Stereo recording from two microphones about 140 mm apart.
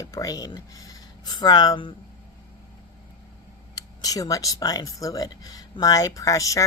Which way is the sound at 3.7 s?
25° left (ahead or behind).